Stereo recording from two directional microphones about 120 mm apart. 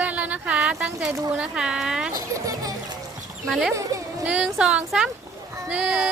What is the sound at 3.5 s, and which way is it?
Speech, centre (ahead or behind).